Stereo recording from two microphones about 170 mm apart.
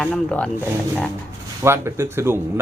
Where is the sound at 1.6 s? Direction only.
15° right (ahead or behind).